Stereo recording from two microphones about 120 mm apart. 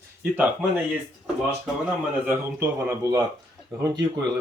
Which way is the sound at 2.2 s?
20° right (ahead or behind).